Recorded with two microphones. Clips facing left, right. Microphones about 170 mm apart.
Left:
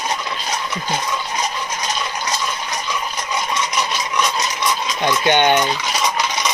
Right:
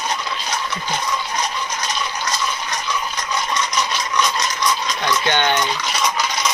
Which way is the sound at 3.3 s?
10° left (ahead or behind).